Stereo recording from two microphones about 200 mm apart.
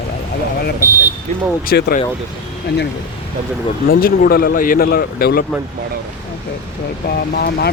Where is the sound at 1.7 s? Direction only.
50° left (ahead or behind).